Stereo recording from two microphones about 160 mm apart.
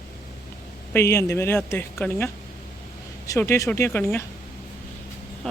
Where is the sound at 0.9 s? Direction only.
15° left (ahead or behind).